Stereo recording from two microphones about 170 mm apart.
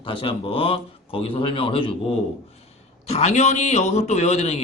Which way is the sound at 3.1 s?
40° left (ahead or behind).